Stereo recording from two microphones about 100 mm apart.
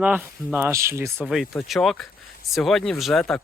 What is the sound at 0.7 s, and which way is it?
Speech, 30° right (ahead or behind).